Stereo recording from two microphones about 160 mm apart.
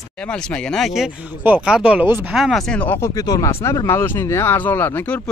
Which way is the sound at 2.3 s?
Centre (ahead or behind).